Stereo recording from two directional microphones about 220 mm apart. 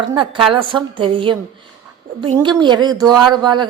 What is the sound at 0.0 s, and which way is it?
Speech, 20° right (ahead or behind).